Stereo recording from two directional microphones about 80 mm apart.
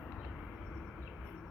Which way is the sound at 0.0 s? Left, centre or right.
Centre.